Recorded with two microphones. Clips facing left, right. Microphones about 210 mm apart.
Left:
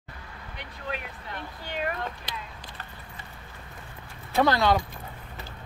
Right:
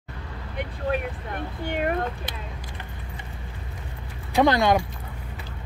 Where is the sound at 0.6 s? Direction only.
50° right (ahead or behind).